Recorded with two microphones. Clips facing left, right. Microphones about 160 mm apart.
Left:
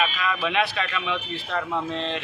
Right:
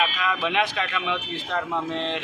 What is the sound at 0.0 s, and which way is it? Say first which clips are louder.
Speech: even; 10° right (ahead or behind).